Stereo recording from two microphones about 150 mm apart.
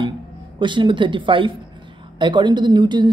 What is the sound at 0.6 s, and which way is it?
Speech, 30° right (ahead or behind).